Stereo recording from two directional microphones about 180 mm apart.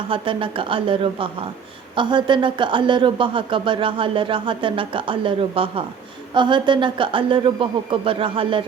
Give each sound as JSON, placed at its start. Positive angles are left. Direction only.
{"t": 0.1, "sound": "speech", "side_deg": -30}